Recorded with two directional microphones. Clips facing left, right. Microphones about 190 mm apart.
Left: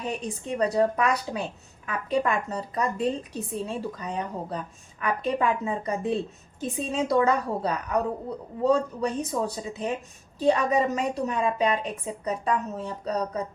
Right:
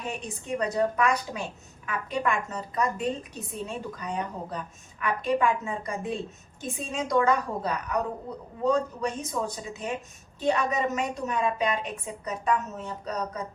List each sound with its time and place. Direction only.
0.1 s a woman's voice: 35° left (ahead or behind)